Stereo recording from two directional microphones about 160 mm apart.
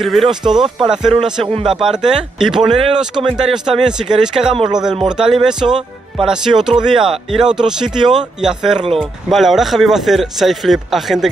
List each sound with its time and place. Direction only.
0.0 s speech: centre (ahead or behind)
1.4 s a man's voice: 35° right (ahead or behind)
1.7 s speech: 5° right (ahead or behind)
4.6 s speech: 25° right (ahead or behind)
5.1 s speech: 5° right (ahead or behind)